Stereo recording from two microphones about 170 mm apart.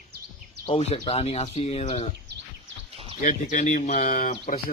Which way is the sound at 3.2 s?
50° left (ahead or behind).